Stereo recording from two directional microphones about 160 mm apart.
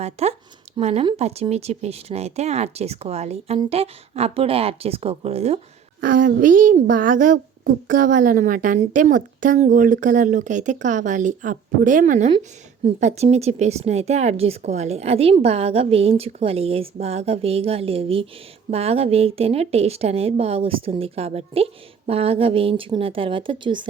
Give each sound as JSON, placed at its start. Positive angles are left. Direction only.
{"t": 0.0, "sound": "a woman's voice", "side_deg": -40}
{"t": 6.0, "sound": "a woman's voice", "side_deg": -60}